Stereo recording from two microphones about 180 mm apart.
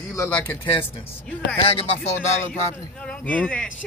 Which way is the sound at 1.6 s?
30° left (ahead or behind).